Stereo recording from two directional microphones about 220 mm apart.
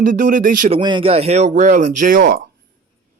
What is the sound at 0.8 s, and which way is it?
A man's voice, 20° right (ahead or behind).